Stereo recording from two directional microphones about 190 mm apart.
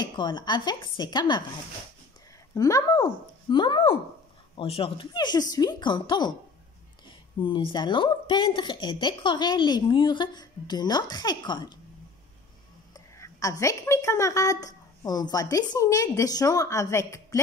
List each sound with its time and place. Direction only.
0.0 s speech: 25° left (ahead or behind)
2.5 s speech: 20° left (ahead or behind)
7.3 s speech: 25° left (ahead or behind)
12.9 s a woman's voice: 15° left (ahead or behind)